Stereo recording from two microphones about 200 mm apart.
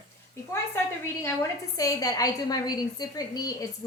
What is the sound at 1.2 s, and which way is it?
A woman's voice, 15° left (ahead or behind).